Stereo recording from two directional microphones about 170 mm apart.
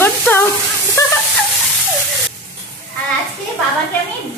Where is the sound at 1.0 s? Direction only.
15° left (ahead or behind).